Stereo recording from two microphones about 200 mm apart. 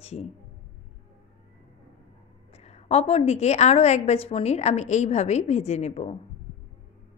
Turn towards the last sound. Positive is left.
turn(degrees=35)  # may be behind; listen again after turning